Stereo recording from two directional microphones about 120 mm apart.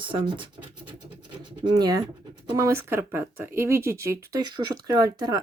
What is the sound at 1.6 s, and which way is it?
Speech, 35° right (ahead or behind).